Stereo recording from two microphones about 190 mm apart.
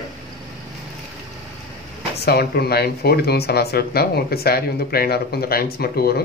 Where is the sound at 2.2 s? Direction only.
55° left (ahead or behind).